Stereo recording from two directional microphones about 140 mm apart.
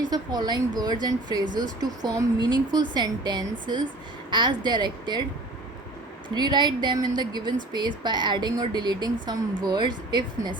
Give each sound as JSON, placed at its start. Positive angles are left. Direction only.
{"t": 0.1, "sound": "speech", "side_deg": -30}
{"t": 6.2, "sound": "speech", "side_deg": -30}